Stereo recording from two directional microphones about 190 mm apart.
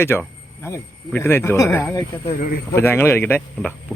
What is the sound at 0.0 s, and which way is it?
Speech, 10° left (ahead or behind).